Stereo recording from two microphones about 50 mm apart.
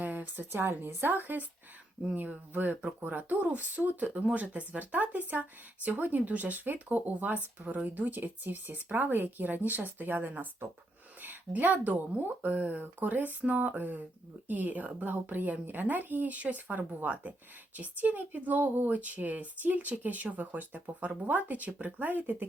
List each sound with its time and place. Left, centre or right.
0.0 s speech: right
11.2 s a sound: right
11.9 s speech: right